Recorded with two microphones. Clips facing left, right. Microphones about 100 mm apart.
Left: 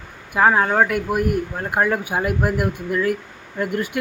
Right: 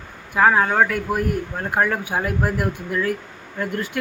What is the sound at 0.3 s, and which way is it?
Speech, 5° left (ahead or behind).